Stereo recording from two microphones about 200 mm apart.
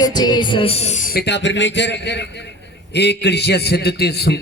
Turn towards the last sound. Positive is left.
turn(degrees=55)  # may be behind; listen again after turning